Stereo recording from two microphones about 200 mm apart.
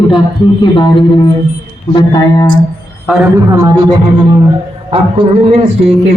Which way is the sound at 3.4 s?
15° right (ahead or behind).